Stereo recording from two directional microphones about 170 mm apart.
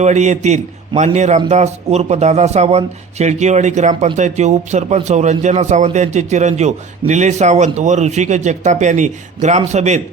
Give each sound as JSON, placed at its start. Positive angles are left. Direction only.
{"t": 0.0, "sound": "a man's voice", "side_deg": -40}